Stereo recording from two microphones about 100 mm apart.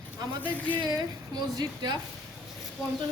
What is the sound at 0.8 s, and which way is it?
A woman's voice, 45° right (ahead or behind).